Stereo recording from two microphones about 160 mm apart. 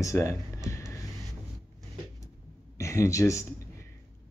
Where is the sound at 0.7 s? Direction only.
20° left (ahead or behind).